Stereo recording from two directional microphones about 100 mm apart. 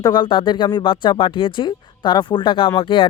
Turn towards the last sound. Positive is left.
turn(degrees=60)  # may be behind; listen again after turning